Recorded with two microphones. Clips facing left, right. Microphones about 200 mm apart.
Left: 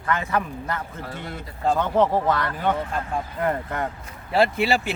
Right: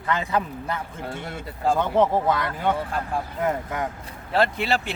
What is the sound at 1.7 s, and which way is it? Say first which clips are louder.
Speech: even; 10° right (ahead or behind).